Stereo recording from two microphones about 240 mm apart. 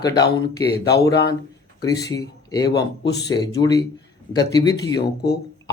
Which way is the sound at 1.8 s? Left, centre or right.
Centre.